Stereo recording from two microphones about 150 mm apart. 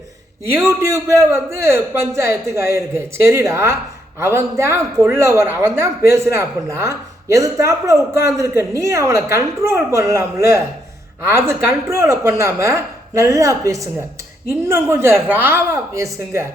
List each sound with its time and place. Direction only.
0.5 s a man's voice: 15° right (ahead or behind)